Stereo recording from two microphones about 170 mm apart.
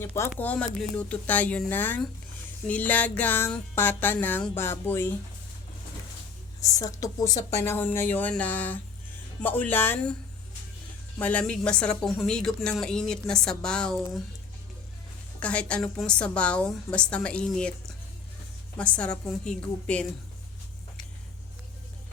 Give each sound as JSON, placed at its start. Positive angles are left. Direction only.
{"t": 0.0, "sound": "music", "side_deg": 15}
{"t": 6.6, "sound": "music", "side_deg": 20}
{"t": 11.2, "sound": "a woman's voice", "side_deg": 10}
{"t": 15.4, "sound": "music", "side_deg": 5}
{"t": 18.8, "sound": "music", "side_deg": 5}